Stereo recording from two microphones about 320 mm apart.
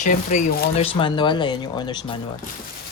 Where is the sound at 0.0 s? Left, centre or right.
Left.